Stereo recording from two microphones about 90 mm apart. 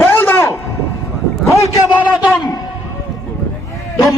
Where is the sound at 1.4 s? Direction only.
35° left (ahead or behind).